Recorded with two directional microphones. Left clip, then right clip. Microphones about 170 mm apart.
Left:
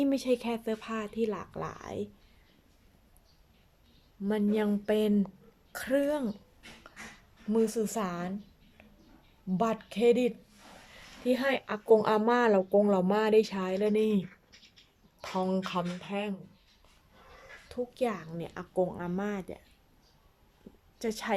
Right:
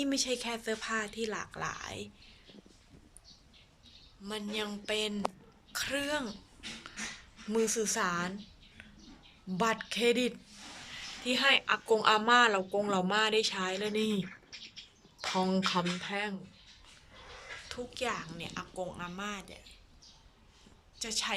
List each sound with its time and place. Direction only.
0.0 s speech: 25° left (ahead or behind)
4.2 s a woman's voice: 50° left (ahead or behind)
7.5 s speech: 20° left (ahead or behind)
9.5 s speech: 20° left (ahead or behind)
11.3 s a woman's voice: 30° left (ahead or behind)
17.7 s a woman's voice: 30° left (ahead or behind); by 19.6 s 45° left (ahead or behind)
21.0 s speech: 45° left (ahead or behind)